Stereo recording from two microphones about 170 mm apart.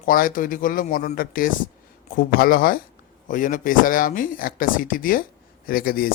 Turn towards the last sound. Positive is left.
turn(degrees=60)  # may be behind; listen again after turning